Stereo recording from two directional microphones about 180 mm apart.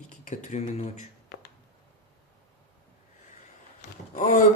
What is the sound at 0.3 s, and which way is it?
Speech, 40° left (ahead or behind).